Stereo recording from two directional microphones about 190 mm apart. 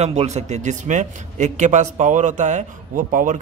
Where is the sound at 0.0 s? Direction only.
35° right (ahead or behind).